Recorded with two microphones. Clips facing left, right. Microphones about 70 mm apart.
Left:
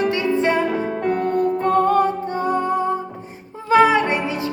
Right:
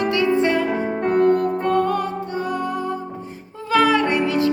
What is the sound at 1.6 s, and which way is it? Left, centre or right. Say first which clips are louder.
Music: left 6 dB; left.